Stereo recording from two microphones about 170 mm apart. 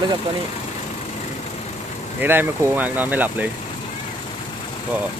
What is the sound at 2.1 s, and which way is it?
Speech, 10° right (ahead or behind).